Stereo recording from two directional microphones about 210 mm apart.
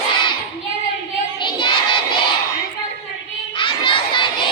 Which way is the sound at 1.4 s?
20° left (ahead or behind).